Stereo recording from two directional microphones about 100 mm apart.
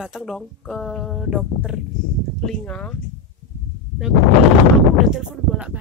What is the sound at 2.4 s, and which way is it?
Speech, 10° left (ahead or behind).